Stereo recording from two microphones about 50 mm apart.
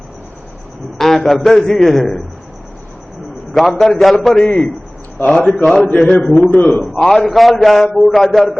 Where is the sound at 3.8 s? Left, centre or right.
Centre.